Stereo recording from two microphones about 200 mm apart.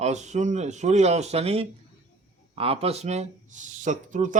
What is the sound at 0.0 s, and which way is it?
A man's voice, 35° right (ahead or behind).